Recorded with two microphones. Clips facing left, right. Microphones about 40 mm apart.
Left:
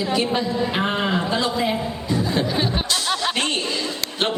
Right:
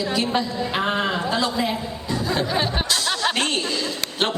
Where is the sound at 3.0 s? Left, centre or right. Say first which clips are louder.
Right 1 dB; centre.